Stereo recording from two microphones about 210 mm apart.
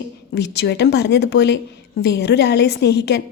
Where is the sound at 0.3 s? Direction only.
50° left (ahead or behind).